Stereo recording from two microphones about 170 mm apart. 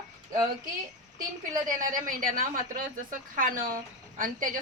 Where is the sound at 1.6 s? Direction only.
50° right (ahead or behind).